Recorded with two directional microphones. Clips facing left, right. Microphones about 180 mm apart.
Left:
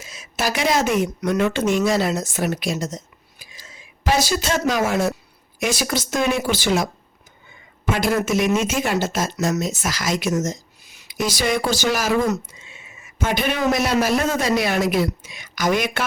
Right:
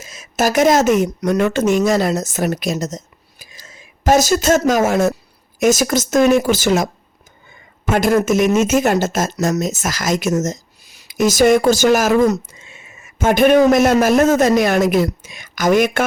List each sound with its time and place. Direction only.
0.0 s speech: 45° right (ahead or behind)
7.9 s speech: 45° right (ahead or behind)